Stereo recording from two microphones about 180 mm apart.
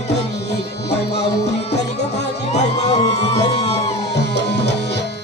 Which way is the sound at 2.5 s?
35° left (ahead or behind).